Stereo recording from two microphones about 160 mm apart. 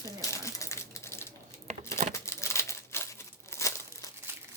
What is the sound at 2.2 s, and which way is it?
Crumpling, 20° left (ahead or behind).